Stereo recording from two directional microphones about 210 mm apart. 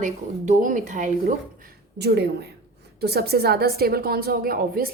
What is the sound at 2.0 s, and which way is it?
A woman's voice, 50° right (ahead or behind).